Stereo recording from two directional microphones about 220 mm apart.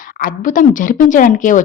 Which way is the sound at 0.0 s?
40° left (ahead or behind).